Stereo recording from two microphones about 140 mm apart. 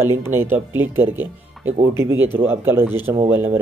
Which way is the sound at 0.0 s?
15° right (ahead or behind).